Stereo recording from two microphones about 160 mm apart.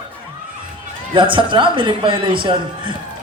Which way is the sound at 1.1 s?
30° right (ahead or behind).